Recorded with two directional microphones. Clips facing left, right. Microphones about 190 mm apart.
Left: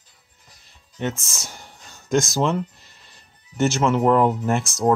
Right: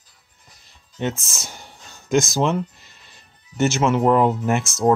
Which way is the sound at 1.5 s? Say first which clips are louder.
Right 1 dB; 25° right (ahead or behind).